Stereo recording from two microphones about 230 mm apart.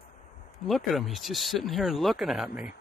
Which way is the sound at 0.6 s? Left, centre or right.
Centre.